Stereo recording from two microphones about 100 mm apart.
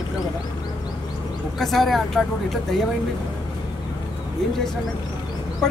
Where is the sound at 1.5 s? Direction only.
Centre (ahead or behind).